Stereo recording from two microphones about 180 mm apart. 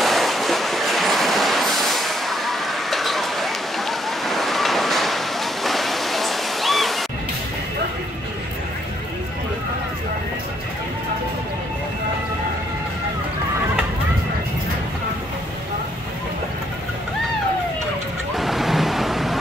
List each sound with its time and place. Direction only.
0.0 s train: centre (ahead or behind)
18.3 s waves: centre (ahead or behind)